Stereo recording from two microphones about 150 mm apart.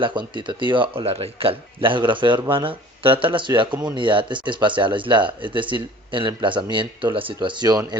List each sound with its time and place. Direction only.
0.0 s speech: 30° right (ahead or behind)
3.7 s speech: 10° right (ahead or behind)
3.9 s speech: 35° right (ahead or behind)